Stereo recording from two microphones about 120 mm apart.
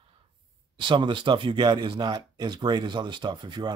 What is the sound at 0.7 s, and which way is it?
Speech, 40° right (ahead or behind).